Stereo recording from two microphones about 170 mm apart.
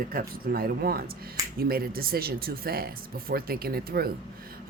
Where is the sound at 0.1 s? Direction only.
60° right (ahead or behind).